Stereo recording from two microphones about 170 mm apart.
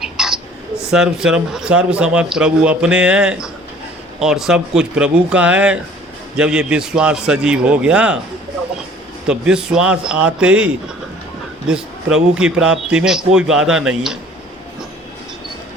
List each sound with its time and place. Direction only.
0.0 s a sound: centre (ahead or behind)
0.9 s speech: 5° right (ahead or behind)
9.2 s speech: 5° right (ahead or behind)